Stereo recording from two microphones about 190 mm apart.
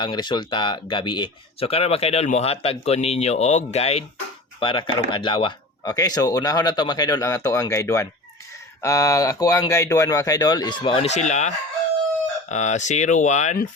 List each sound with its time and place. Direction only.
0.0 s speech: 25° left (ahead or behind)